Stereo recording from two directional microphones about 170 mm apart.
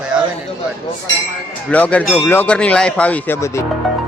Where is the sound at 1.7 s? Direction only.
10° left (ahead or behind).